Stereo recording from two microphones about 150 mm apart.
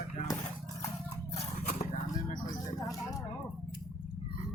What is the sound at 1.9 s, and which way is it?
Vehicle, 70° left (ahead or behind).